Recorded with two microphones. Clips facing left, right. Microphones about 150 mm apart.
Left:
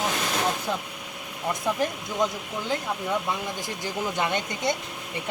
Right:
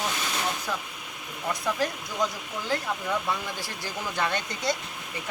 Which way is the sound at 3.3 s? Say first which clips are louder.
Left 1 dB; 20° left (ahead or behind).